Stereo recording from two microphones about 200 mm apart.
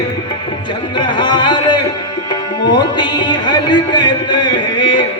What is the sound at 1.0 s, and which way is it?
Music, 25° left (ahead or behind).